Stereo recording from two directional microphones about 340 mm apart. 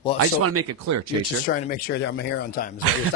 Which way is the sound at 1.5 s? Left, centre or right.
Left.